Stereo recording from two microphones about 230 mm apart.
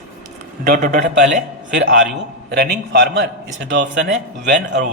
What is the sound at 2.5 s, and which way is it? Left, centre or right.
A man's voice, right.